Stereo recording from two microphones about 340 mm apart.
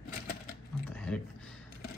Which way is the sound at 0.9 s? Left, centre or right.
Centre.